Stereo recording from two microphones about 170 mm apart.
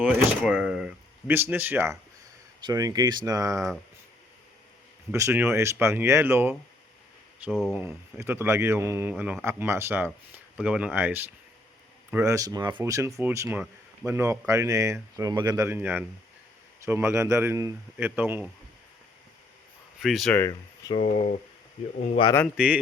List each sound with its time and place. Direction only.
0.0 s speech: 5° right (ahead or behind); by 3.6 s 20° right (ahead or behind)
5.1 s speech: 15° right (ahead or behind)
7.9 s speech: 15° right (ahead or behind)
15.6 s speech: 10° right (ahead or behind)
20.0 s speech: centre (ahead or behind)
20.3 s speech: 15° left (ahead or behind)
20.9 s speech: 40° left (ahead or behind)
22.5 s speech: 5° right (ahead or behind)